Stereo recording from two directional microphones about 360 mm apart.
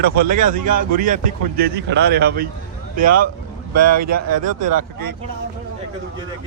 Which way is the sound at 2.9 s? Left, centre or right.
Right.